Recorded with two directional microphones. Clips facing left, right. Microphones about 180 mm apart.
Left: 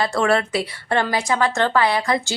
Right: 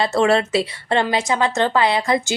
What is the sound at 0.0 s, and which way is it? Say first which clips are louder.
A woman's voice: right 2 dB; 25° right (ahead or behind).